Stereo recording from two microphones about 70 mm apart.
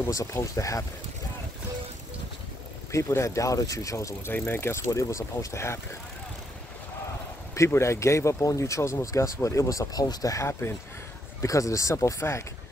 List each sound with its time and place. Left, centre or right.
0.1 s speech: left
2.9 s speech: left
4.3 s speech: left
7.5 s speech: left
10.6 s speech: left
11.4 s speech: left